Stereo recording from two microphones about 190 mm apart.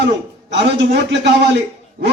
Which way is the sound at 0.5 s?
65° right (ahead or behind).